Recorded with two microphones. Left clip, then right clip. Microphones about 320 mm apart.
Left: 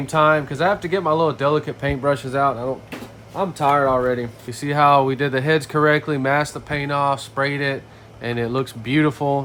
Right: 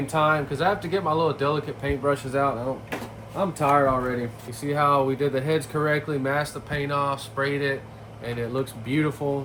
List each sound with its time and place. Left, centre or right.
0.1 s speech: left
3.6 s speech: left